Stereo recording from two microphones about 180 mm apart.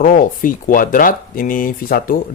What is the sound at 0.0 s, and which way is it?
Speech, 50° left (ahead or behind).